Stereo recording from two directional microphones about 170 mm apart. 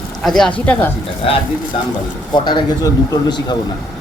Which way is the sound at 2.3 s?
25° left (ahead or behind).